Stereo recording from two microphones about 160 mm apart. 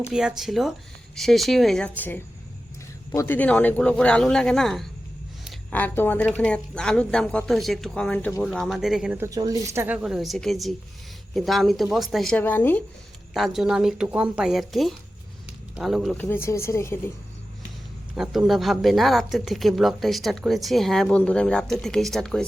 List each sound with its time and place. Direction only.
0.1 s a woman's voice: 5° right (ahead or behind)
5.7 s a woman's voice: 10° left (ahead or behind); by 9.2 s 5° right (ahead or behind)
9.2 s a woman's voice: 20° right (ahead or behind); by 12.4 s centre (ahead or behind)
12.4 s a woman's voice: 15° left (ahead or behind)
13.3 s a woman's voice: centre (ahead or behind)
16.1 s a woman's voice: 15° left (ahead or behind)
18.1 s a woman's voice: centre (ahead or behind)